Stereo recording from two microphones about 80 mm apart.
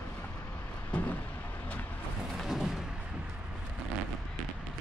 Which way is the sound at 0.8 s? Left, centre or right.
Left.